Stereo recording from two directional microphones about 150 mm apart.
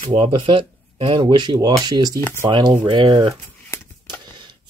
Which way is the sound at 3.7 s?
20° left (ahead or behind).